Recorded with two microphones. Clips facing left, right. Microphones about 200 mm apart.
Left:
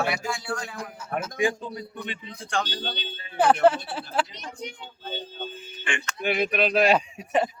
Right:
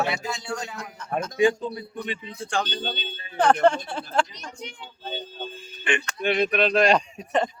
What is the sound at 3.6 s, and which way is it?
Speech, 5° left (ahead or behind).